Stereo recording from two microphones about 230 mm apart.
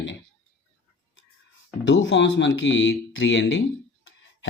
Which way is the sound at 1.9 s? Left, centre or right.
Left.